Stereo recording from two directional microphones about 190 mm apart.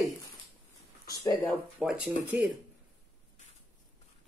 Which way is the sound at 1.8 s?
5° right (ahead or behind).